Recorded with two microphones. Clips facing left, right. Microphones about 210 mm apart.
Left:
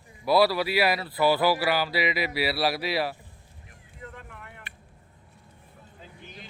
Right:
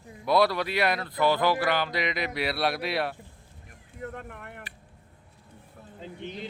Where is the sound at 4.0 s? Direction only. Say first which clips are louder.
Right 6 dB; 50° right (ahead or behind).